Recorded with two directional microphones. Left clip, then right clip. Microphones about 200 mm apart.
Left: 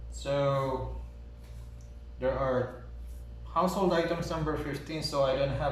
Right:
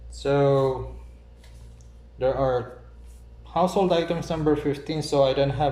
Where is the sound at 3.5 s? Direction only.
45° right (ahead or behind).